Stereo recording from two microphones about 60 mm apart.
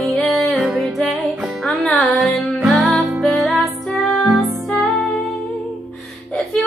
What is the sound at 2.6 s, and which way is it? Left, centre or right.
Music, centre.